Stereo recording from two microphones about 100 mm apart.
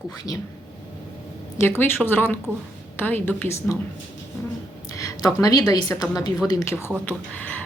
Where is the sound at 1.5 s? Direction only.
20° left (ahead or behind).